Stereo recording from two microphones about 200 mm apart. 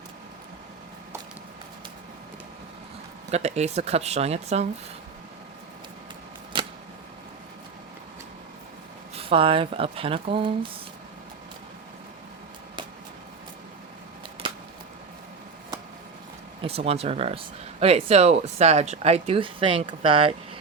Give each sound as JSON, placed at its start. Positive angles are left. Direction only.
{"t": 3.3, "sound": "speech", "side_deg": -35}
{"t": 9.1, "sound": "speech", "side_deg": -25}
{"t": 16.6, "sound": "speech", "side_deg": -30}